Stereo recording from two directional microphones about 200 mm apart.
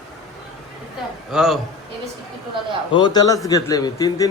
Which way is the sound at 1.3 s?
Centre (ahead or behind).